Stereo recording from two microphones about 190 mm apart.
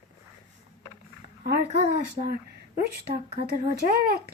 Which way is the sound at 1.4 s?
35° right (ahead or behind).